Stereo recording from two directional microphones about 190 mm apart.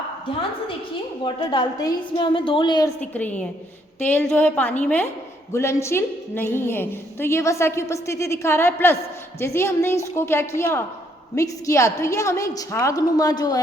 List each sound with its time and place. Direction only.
1.2 s a woman's voice: 25° left (ahead or behind)
3.0 s a woman's voice: 10° left (ahead or behind)